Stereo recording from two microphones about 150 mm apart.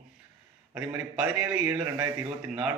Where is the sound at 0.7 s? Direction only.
5° right (ahead or behind).